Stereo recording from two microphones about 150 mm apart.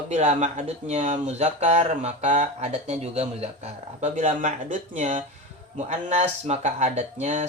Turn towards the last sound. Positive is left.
turn(degrees=-50)  # may be behind; listen again after turning